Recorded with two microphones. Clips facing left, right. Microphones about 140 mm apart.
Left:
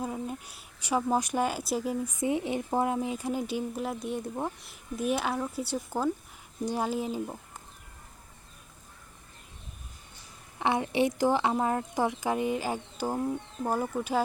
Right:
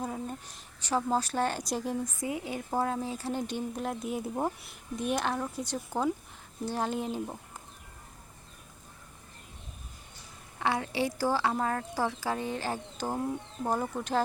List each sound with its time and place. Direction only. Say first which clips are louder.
0.0 s speech: left 2 dB; 5° left (ahead or behind)
2.2 s a woman's voice: left 5 dB; 25° left (ahead or behind); by 7.3 s 5° left (ahead or behind)
10.6 s a woman's voice: left 4 dB; 20° left (ahead or behind)